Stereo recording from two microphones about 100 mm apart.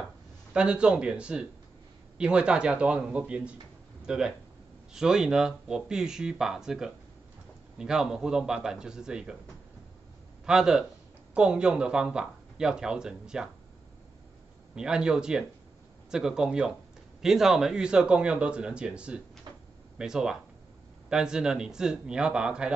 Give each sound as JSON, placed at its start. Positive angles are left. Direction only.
{"t": 0.5, "sound": "speech", "side_deg": -10}
{"t": 10.4, "sound": "speech", "side_deg": -5}
{"t": 14.8, "sound": "speech", "side_deg": -10}
{"t": 19.5, "sound": "a sound", "side_deg": -45}
{"t": 20.0, "sound": "speech", "side_deg": -5}